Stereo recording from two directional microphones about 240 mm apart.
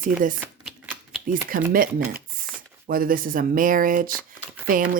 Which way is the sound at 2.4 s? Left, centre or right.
Right.